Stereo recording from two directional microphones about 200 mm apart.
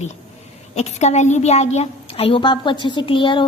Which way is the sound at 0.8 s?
35° left (ahead or behind).